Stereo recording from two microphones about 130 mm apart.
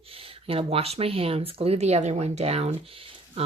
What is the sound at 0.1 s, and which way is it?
Speech, 45° right (ahead or behind).